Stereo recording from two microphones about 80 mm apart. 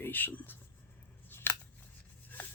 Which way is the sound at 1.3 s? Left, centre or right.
Left.